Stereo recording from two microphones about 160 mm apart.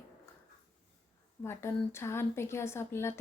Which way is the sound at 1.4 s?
15° left (ahead or behind).